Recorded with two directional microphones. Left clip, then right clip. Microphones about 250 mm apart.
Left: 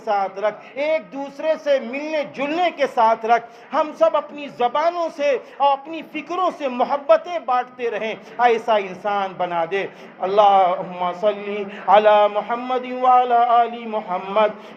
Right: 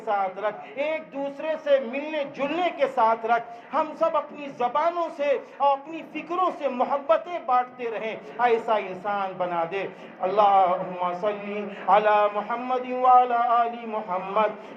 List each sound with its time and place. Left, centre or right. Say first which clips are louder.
0.0 s a man's voice: left 5 dB; left